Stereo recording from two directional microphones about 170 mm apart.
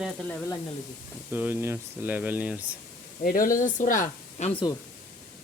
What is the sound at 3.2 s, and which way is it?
Speech, 55° left (ahead or behind).